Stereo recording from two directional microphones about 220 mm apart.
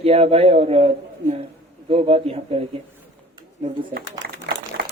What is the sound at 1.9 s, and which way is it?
Speech, 25° right (ahead or behind).